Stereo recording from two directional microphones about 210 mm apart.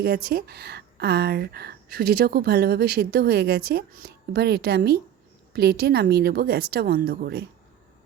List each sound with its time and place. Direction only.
0.0 s speech: 50° right (ahead or behind)